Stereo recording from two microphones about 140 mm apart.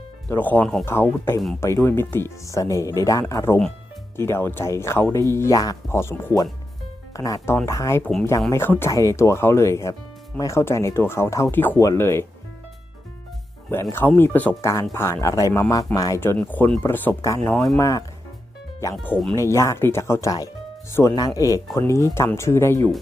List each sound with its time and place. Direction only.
0.3 s speech: 15° left (ahead or behind)
13.9 s speech: 15° left (ahead or behind)